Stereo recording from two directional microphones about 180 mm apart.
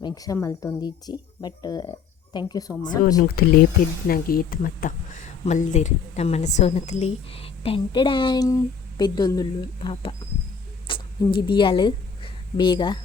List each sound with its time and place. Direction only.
0.0 s a woman's voice: 20° left (ahead or behind)
3.4 s speech: 60° left (ahead or behind); by 10.1 s 30° left (ahead or behind)
10.8 s a sound: 30° left (ahead or behind)
11.4 s a woman's voice: 30° left (ahead or behind)